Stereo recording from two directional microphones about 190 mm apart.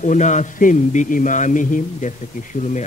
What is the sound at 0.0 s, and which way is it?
A man's voice, 40° left (ahead or behind).